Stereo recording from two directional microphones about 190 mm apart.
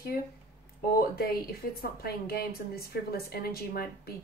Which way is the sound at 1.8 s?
55° left (ahead or behind).